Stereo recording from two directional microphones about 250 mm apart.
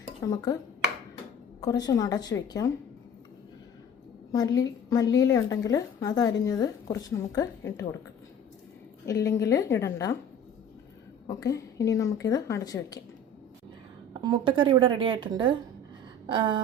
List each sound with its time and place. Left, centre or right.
0.2 s a woman's voice: centre
1.6 s a woman's voice: centre
4.3 s a woman's voice: centre
9.2 s a woman's voice: centre
11.3 s a woman's voice: centre
14.1 s a woman's voice: centre